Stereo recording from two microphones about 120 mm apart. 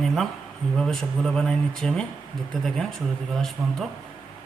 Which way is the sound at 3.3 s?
5° left (ahead or behind).